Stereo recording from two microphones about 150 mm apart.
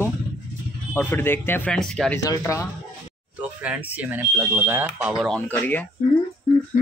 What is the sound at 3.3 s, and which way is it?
Speech, 10° right (ahead or behind).